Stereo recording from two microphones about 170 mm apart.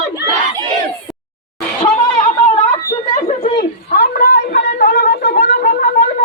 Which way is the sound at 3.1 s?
40° left (ahead or behind).